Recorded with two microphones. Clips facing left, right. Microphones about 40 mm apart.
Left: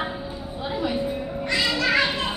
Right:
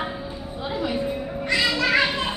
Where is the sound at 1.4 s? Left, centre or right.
Centre.